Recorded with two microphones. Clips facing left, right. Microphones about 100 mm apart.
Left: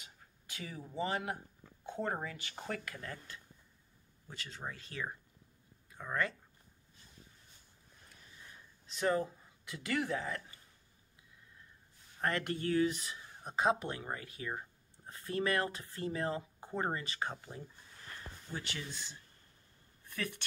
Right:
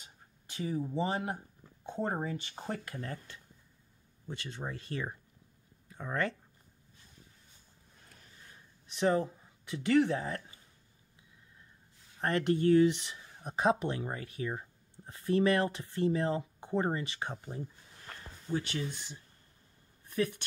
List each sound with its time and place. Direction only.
0.0 s a sound: 30° right (ahead or behind)
1.9 s speech: 25° right (ahead or behind)
8.9 s speech: 25° right (ahead or behind)
12.2 s speech: 25° right (ahead or behind)
20.1 s speech: 15° right (ahead or behind)